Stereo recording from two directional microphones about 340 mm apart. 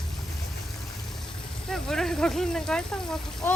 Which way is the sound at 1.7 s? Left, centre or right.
Centre.